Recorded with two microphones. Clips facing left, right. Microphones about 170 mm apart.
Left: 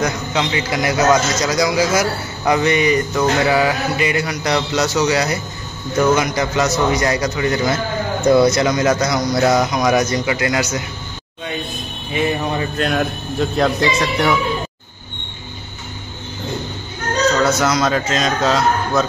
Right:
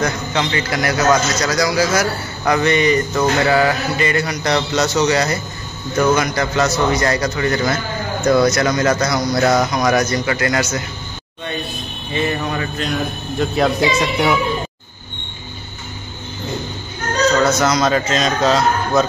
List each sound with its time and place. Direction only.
0.0 s a man's voice: 10° left (ahead or behind)
12.1 s a man's voice: 10° left (ahead or behind)
12.7 s a man's voice: 60° left (ahead or behind)
13.4 s speech: 5° right (ahead or behind)
17.5 s a man's voice: 5° left (ahead or behind)